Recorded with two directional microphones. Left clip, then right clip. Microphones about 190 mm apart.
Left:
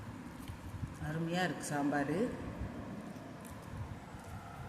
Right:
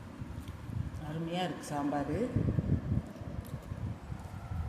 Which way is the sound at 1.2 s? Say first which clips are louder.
Even; 5° left (ahead or behind).